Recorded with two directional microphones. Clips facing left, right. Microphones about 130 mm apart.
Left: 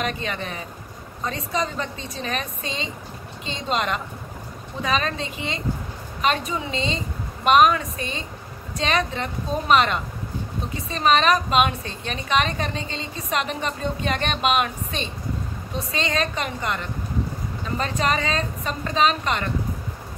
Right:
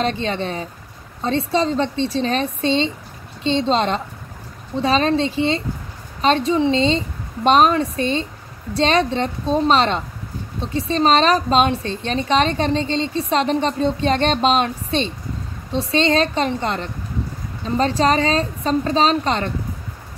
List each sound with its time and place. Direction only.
0.0 s a woman's voice: 30° right (ahead or behind)